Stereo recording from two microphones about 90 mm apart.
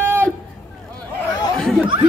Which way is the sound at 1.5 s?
5° left (ahead or behind).